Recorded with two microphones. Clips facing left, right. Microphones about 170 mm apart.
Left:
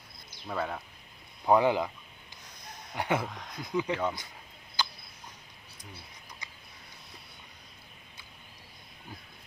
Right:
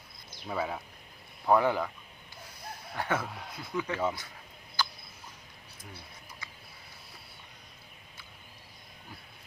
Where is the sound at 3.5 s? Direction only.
15° left (ahead or behind).